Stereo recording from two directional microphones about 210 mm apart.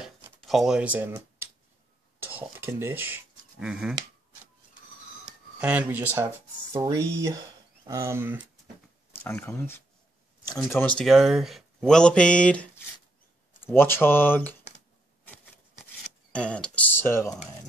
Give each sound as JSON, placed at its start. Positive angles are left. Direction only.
{"t": 0.0, "sound": "a sound", "side_deg": 0}
{"t": 2.3, "sound": "speech", "side_deg": -10}
{"t": 5.6, "sound": "speech", "side_deg": -5}
{"t": 9.1, "sound": "speech", "side_deg": 10}
{"t": 16.3, "sound": "speech", "side_deg": 5}